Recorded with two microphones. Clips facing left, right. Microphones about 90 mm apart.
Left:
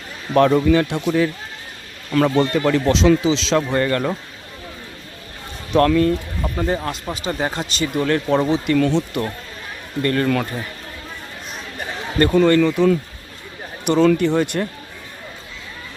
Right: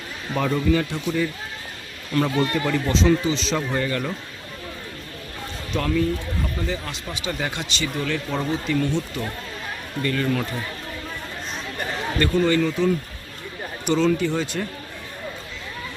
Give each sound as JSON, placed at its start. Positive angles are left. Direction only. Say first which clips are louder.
{"t": 0.3, "sound": "speech", "louder": "left 7 dB", "side_deg": 70}
{"t": 5.7, "sound": "speech", "louder": "left 8 dB", "side_deg": 65}
{"t": 6.6, "sound": "speech", "louder": "left 7 dB", "side_deg": 45}
{"t": 7.3, "sound": "speech", "louder": "left 4 dB", "side_deg": 30}
{"t": 10.0, "sound": "speech", "louder": "left 5 dB", "side_deg": 45}
{"t": 12.3, "sound": "speech", "louder": "left 6 dB", "side_deg": 65}